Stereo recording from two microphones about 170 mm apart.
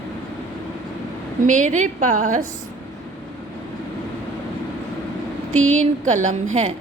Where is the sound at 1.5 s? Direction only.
45° right (ahead or behind).